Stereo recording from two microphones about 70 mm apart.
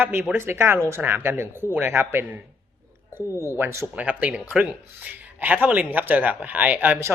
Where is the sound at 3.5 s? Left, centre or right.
Right.